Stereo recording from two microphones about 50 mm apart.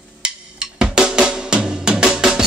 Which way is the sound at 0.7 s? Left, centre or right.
Centre.